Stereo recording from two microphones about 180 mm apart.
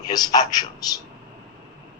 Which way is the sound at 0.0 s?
20° left (ahead or behind).